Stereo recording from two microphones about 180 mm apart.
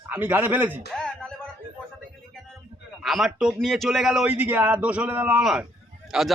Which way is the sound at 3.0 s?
Centre (ahead or behind).